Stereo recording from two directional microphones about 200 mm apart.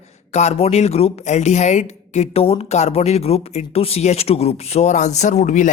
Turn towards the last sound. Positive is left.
turn(degrees=40)  # may be behind; listen again after turning